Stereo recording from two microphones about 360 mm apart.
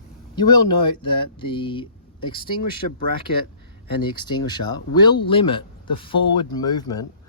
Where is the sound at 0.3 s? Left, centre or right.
Centre.